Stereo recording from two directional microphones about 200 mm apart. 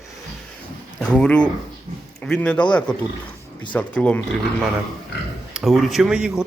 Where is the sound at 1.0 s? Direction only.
5° left (ahead or behind).